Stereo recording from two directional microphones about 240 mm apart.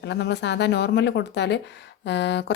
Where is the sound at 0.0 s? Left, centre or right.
Left.